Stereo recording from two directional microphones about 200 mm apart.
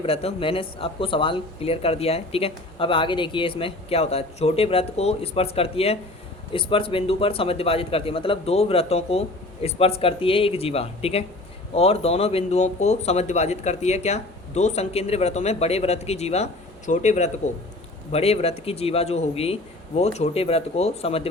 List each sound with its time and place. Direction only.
0.0 s speech: 30° left (ahead or behind)